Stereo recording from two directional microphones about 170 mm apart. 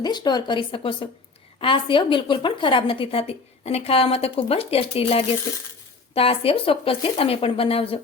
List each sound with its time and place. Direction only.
0.0 s a woman's voice: 25° left (ahead or behind)